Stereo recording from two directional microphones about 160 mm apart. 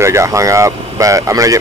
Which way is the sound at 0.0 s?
15° right (ahead or behind).